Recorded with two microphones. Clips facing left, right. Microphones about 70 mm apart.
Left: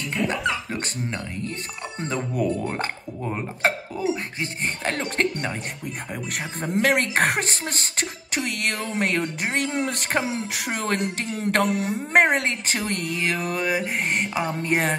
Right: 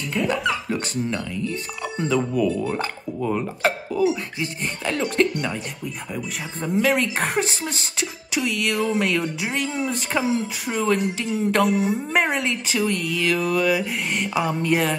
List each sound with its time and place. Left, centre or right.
0.1 s dog: centre
2.0 s speech: left
6.6 s speech: left